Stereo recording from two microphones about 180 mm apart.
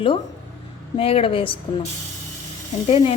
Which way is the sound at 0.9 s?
30° left (ahead or behind).